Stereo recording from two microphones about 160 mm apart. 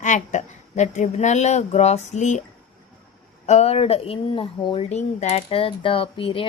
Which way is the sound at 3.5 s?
40° left (ahead or behind).